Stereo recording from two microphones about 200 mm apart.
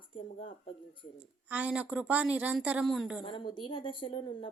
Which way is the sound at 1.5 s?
5° right (ahead or behind).